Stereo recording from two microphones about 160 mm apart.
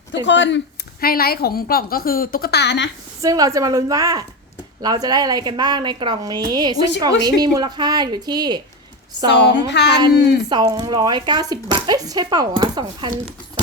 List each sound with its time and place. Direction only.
0.3 s speech: 90° left
1.0 s speech: 70° left (ahead or behind); by 2.8 s 90° left
3.2 s speech: 20° right (ahead or behind)
9.3 s speech: 90° left
10.5 s speech: 25° right (ahead or behind)